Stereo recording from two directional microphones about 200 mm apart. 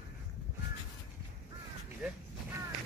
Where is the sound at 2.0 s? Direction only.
5° right (ahead or behind).